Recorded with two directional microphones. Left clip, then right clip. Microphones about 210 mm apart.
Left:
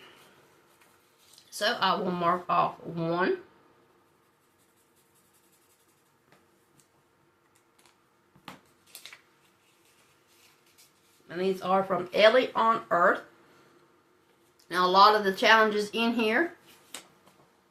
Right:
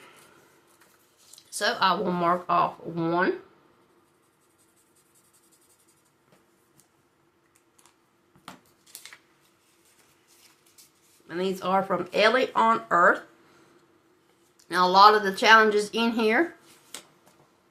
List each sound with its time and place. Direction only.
1.5 s speech: 30° right (ahead or behind)
11.3 s speech: 35° right (ahead or behind)
14.7 s speech: 30° right (ahead or behind)